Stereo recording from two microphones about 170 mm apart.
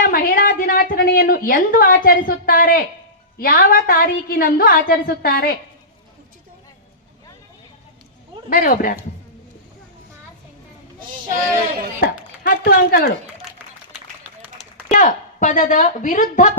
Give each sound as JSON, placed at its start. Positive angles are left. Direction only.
{"t": 0.0, "sound": "a woman's voice", "side_deg": 60}
{"t": 8.4, "sound": "a woman's voice", "side_deg": 55}
{"t": 11.9, "sound": "speech", "side_deg": 55}
{"t": 14.3, "sound": "run", "side_deg": -10}
{"t": 14.8, "sound": "a woman's voice", "side_deg": 50}